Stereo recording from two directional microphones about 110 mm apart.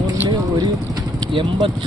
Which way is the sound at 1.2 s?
45° right (ahead or behind).